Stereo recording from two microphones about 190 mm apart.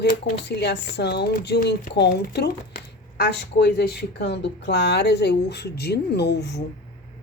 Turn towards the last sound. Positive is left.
turn(degrees=60)  # may be behind; listen again after turning